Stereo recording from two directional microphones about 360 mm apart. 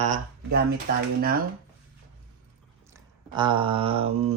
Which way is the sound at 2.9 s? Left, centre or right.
Centre.